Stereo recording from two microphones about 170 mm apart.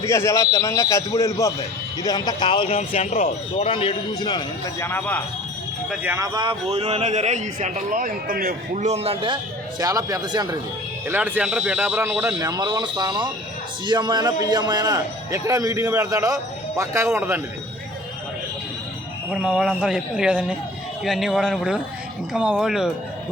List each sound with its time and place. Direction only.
0.0 s a man's voice: 15° left (ahead or behind)
2.7 s a man's voice: 40° left (ahead or behind); by 4.4 s 25° left (ahead or behind)
4.8 s a man's voice: 10° left (ahead or behind)
5.9 s a man's voice: 10° right (ahead or behind); by 9.4 s 30° right (ahead or behind)
9.8 s a man's voice: 20° right (ahead or behind)
11.1 s a man's voice: 10° right (ahead or behind)
12.4 s a man's voice: 20° right (ahead or behind)
19.3 s speech: 5° right (ahead or behind)